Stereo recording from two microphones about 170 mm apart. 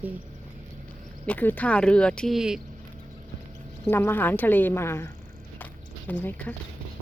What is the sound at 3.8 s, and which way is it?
Speech, 10° left (ahead or behind).